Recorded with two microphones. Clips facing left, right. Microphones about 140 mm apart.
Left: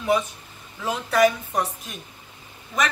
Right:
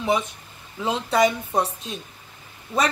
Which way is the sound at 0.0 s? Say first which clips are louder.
Left 1 dB; 25° right (ahead or behind).